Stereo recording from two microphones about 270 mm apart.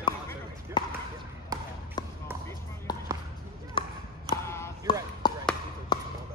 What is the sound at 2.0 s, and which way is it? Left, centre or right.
Basketball bounce, centre.